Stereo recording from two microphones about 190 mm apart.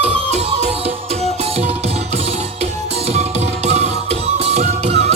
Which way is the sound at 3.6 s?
35° right (ahead or behind).